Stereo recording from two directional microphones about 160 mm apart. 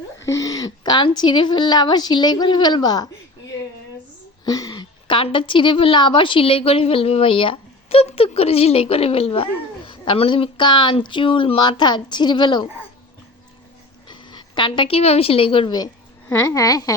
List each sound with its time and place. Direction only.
0.2 s a woman's voice: 20° left (ahead or behind)
4.4 s a woman's voice: 25° left (ahead or behind)
14.1 s a woman's voice: 30° left (ahead or behind)